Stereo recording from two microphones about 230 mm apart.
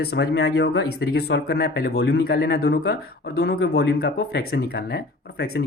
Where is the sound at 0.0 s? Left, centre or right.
Left.